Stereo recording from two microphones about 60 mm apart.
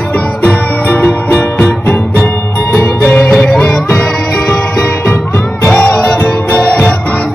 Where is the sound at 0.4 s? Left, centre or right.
Left.